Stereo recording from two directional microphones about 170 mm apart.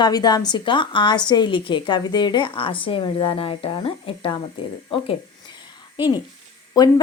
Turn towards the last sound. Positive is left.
turn(degrees=20)  # may be behind; listen again after turning